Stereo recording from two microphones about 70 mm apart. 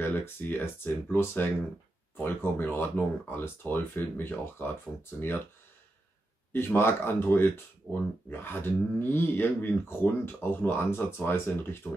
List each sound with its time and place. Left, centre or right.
0.0 s speech: left
6.5 s speech: left